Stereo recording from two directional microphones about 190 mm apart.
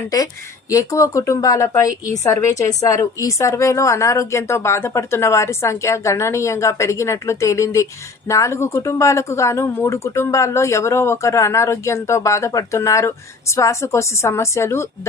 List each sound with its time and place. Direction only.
0.1 s speech: 20° left (ahead or behind)